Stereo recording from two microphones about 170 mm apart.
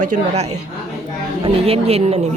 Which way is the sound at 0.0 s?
40° right (ahead or behind).